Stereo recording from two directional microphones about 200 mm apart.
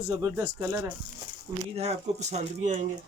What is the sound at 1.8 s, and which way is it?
Speech, 30° right (ahead or behind).